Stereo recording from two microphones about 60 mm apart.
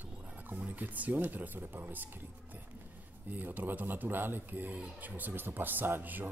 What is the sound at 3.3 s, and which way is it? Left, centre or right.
Speech, right.